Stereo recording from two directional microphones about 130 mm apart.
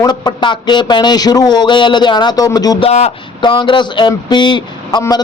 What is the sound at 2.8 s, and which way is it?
Speech, 55° left (ahead or behind).